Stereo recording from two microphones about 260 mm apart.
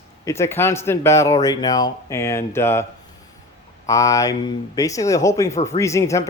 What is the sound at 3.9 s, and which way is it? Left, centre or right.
Speech, centre.